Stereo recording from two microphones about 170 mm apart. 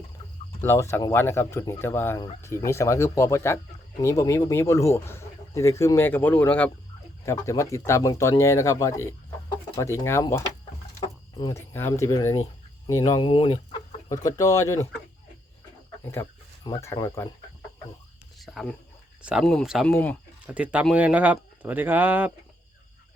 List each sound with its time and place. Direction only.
0.6 s speech: 15° left (ahead or behind)
16.6 s speech: 20° left (ahead or behind)
18.3 s speech: centre (ahead or behind)
19.9 s speech: 10° left (ahead or behind)
20.5 s speech: 10° right (ahead or behind)